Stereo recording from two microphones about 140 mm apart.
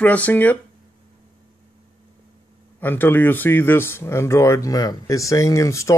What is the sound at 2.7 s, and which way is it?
Speech, 15° left (ahead or behind).